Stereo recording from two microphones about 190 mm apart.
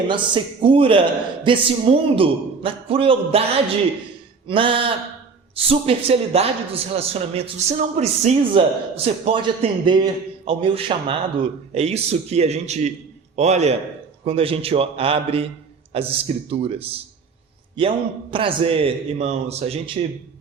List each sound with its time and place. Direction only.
0.1 s a man's voice: 25° right (ahead or behind)
4.4 s a man's voice: 25° right (ahead or behind)